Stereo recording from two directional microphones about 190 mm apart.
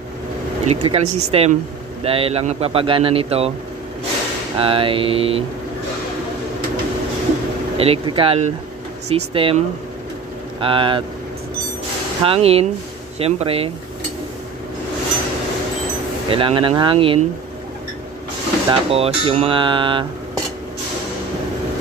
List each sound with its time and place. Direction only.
0.7 s a man's voice: 35° right (ahead or behind)
4.6 s speech: 30° right (ahead or behind)
7.7 s a man's voice: 30° right (ahead or behind)
10.6 s speech: 25° right (ahead or behind)
12.3 s a man's voice: 30° right (ahead or behind)
16.3 s speech: 30° right (ahead or behind)
18.7 s speech: 30° right (ahead or behind)